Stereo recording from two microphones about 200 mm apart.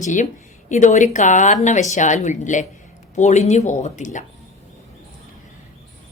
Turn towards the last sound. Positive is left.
turn(degrees=40)  # may be behind; listen again after turning